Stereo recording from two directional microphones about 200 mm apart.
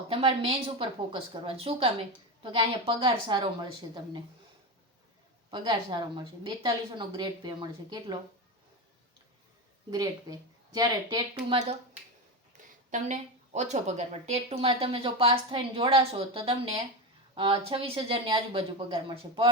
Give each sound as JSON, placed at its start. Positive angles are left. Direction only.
{"t": 0.1, "sound": "a woman's voice", "side_deg": -30}
{"t": 5.5, "sound": "a woman's voice", "side_deg": -25}
{"t": 9.9, "sound": "a woman's voice", "side_deg": -20}
{"t": 12.5, "sound": "a sound", "side_deg": -40}
{"t": 12.9, "sound": "a woman's voice", "side_deg": -35}